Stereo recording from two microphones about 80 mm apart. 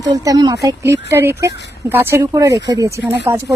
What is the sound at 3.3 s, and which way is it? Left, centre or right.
Speech, right.